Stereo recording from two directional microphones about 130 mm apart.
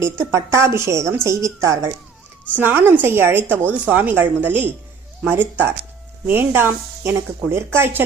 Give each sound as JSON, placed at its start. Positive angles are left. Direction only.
{"t": 0.0, "sound": "a woman's voice", "side_deg": -20}